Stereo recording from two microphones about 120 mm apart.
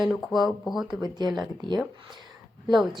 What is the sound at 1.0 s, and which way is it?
Speech, 35° right (ahead or behind).